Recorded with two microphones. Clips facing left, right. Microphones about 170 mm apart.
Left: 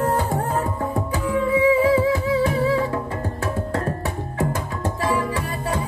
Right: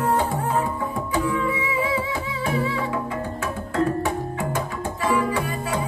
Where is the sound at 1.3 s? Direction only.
35° left (ahead or behind).